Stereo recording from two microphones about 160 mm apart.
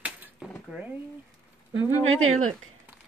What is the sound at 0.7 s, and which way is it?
Speech, 10° right (ahead or behind).